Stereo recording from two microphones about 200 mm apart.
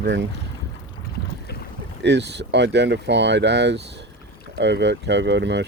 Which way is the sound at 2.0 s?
60° right (ahead or behind).